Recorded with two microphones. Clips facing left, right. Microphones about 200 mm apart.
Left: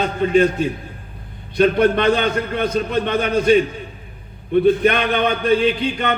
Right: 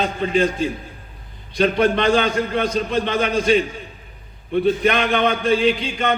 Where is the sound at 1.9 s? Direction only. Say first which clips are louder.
Left 1 dB; 50° left (ahead or behind).